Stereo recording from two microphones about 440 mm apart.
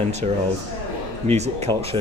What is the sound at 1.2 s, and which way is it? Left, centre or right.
Speech, centre.